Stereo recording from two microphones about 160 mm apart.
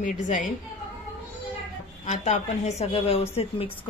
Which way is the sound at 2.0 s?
45° left (ahead or behind).